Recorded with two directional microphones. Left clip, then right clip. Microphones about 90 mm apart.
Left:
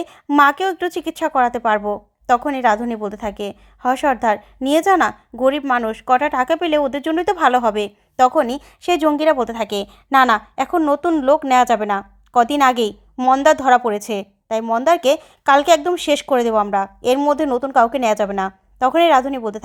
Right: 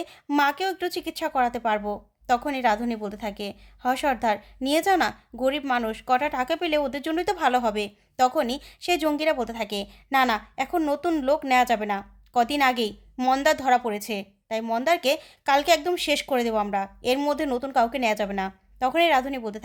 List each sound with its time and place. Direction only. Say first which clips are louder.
0.4 s a woman's voice: left 8 dB; 50° left (ahead or behind)
3.1 s a woman's voice: left 7 dB; 45° left (ahead or behind)
13.1 s a woman's voice: left 8 dB; 30° left (ahead or behind)
13.4 s a woman's voice: left 9 dB; 45° left (ahead or behind)
14.6 s a woman's voice: left 8 dB; 40° left (ahead or behind)
16.7 s a woman's voice: left 8 dB; 55° left (ahead or behind)
17.2 s a woman's voice: left 8 dB; 40° left (ahead or behind)